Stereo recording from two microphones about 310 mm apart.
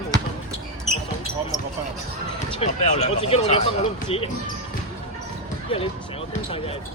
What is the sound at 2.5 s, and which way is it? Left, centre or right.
Speech, centre.